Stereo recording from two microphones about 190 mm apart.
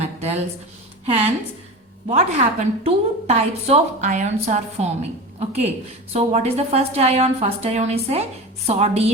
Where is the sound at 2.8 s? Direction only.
35° right (ahead or behind).